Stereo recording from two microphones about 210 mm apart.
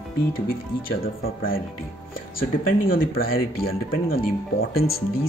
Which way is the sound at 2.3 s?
40° left (ahead or behind).